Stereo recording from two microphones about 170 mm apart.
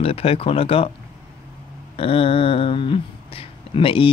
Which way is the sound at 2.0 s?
35° left (ahead or behind).